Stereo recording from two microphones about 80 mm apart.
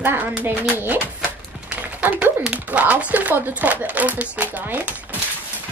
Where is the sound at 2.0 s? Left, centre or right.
Centre.